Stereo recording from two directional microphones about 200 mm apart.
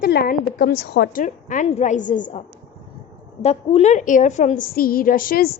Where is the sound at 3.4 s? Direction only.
30° left (ahead or behind).